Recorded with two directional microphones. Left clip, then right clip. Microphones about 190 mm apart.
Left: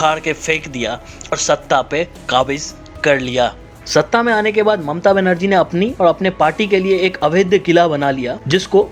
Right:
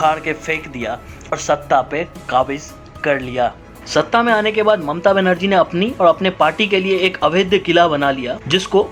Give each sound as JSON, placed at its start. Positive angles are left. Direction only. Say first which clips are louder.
{"t": 0.0, "sound": "speech", "louder": "left 1 dB", "side_deg": 25}